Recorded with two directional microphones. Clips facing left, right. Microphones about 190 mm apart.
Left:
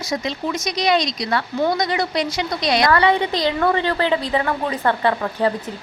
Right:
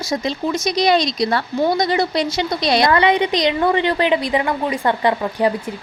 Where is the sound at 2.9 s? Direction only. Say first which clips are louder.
Right 1 dB; 20° right (ahead or behind).